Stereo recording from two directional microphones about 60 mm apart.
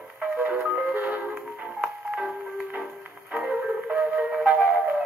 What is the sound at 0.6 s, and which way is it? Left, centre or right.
Music, centre.